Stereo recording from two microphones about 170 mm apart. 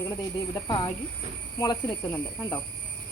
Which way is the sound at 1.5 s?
20° left (ahead or behind).